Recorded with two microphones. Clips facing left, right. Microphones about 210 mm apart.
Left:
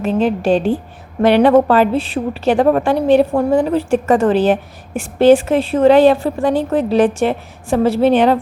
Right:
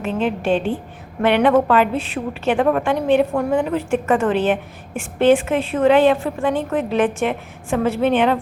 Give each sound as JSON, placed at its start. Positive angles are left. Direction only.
{"t": 0.0, "sound": "a woman's voice", "side_deg": 35}